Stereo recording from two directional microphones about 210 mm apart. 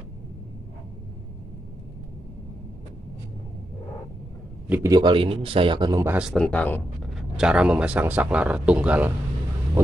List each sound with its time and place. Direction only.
4.6 s speech: 10° right (ahead or behind)
6.1 s speech: centre (ahead or behind)